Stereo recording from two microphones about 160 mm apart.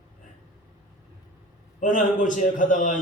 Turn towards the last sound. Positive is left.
turn(degrees=55)  # may be behind; listen again after turning